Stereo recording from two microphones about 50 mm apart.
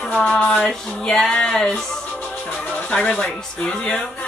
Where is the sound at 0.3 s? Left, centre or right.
Centre.